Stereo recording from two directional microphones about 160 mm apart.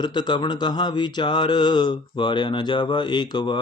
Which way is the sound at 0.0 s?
30° left (ahead or behind).